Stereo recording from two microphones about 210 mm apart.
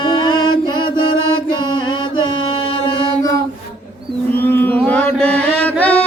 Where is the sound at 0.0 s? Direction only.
20° left (ahead or behind).